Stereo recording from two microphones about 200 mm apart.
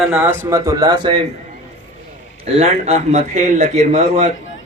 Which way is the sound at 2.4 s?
30° right (ahead or behind).